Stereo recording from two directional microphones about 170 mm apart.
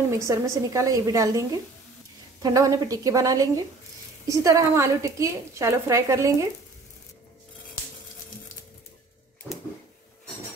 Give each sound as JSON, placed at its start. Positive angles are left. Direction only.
{"t": 0.2, "sound": "a woman's voice", "side_deg": -20}
{"t": 2.4, "sound": "a woman's voice", "side_deg": -20}